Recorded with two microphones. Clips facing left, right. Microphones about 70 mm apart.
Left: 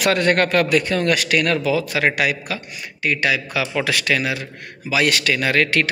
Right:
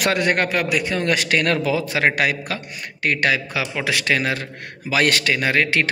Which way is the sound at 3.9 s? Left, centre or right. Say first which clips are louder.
Even; right.